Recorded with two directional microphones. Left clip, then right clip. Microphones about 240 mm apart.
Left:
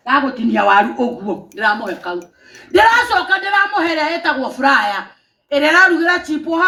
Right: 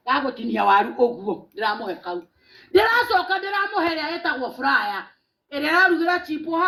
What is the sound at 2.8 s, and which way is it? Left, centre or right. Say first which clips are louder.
Speech: left 7 dB; right.